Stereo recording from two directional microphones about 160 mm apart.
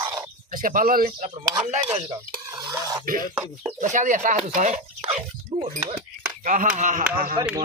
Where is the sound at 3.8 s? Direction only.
50° right (ahead or behind).